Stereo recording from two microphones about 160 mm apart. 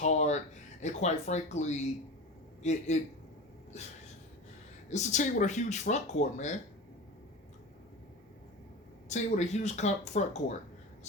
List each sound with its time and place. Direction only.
0.0 s a sound: 45° left (ahead or behind)
0.8 s speech: 45° left (ahead or behind)
9.0 s speech: 45° left (ahead or behind)